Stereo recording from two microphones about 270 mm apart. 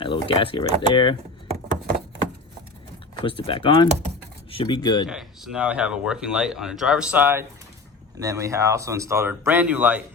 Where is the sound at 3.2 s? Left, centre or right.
Centre.